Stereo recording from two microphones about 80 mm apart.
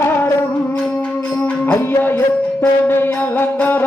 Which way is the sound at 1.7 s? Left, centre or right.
Left.